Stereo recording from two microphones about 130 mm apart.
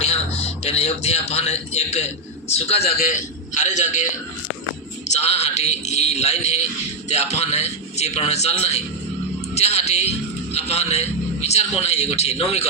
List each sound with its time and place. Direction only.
0.0 s a man's voice: 50° left (ahead or behind); by 4.1 s 65° left (ahead or behind)
5.0 s a man's voice: 55° left (ahead or behind)